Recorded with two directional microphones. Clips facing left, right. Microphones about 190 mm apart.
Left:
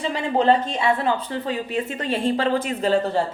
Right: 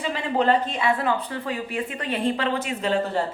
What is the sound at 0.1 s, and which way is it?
Speech, 30° left (ahead or behind).